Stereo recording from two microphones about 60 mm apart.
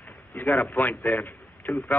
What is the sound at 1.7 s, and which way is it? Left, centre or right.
Speech, centre.